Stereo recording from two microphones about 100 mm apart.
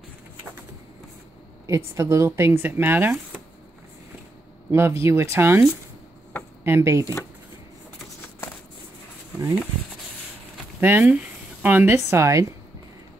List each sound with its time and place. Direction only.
1.7 s speech: 30° right (ahead or behind)
4.6 s speech: 25° right (ahead or behind)
10.8 s speech: 20° right (ahead or behind)